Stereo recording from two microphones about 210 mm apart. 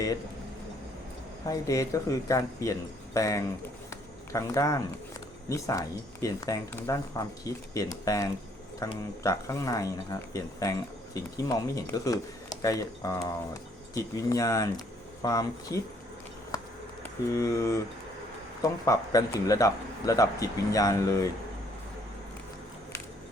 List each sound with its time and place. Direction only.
1.5 s speech: 15° left (ahead or behind)
17.0 s speech: 15° left (ahead or behind)
18.9 s speech: 15° left (ahead or behind)